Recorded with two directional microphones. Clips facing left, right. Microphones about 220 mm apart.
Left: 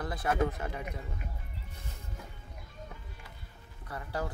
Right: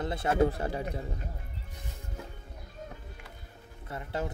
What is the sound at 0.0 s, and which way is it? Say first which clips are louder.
Speech: right 4 dB; 25° right (ahead or behind).